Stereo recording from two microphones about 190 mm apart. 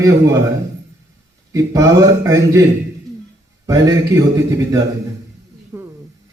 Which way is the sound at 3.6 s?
15° right (ahead or behind).